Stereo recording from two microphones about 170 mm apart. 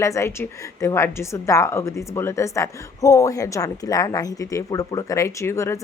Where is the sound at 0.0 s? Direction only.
15° left (ahead or behind).